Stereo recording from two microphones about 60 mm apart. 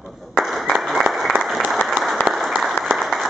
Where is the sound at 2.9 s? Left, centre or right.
Centre.